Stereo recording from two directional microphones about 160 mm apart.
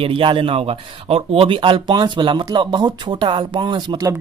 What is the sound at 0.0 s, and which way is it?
Speech, 30° right (ahead or behind).